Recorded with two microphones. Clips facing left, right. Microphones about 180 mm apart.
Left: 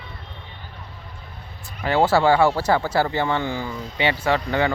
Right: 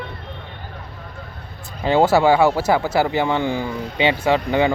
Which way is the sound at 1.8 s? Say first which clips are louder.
Right 3 dB; 20° right (ahead or behind).